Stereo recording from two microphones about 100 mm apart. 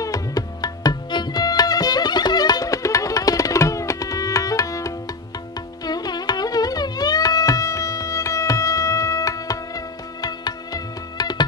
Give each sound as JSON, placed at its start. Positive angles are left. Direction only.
{"t": 0.0, "sound": "tabla", "side_deg": 35}
{"t": 5.9, "sound": "carnatic music", "side_deg": 45}